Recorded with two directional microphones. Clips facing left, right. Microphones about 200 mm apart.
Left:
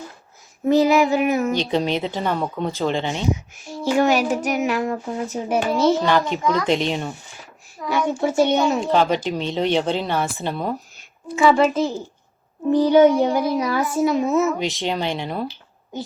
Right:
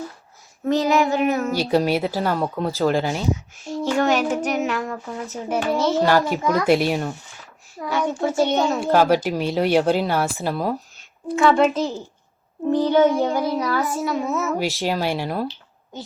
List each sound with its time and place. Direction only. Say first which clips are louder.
0.6 s a child's voice: left 3 dB; 5° left (ahead or behind)
1.5 s speech: right 2 dB; 5° right (ahead or behind)
3.6 s a child's voice: left 2 dB; 10° left (ahead or behind)
6.1 s speech: right 1 dB; 10° right (ahead or behind)
7.9 s a child's voice: left 1 dB; 15° left (ahead or behind)
8.8 s speech: right 2 dB; 10° right (ahead or behind)
12.7 s a child's voice: left 3 dB; 15° left (ahead or behind)
14.8 s speech: right 1 dB; 5° right (ahead or behind)